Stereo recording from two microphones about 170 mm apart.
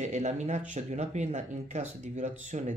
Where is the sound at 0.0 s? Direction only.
45° right (ahead or behind).